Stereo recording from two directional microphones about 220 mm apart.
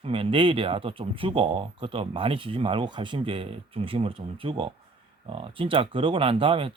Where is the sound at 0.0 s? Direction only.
25° right (ahead or behind).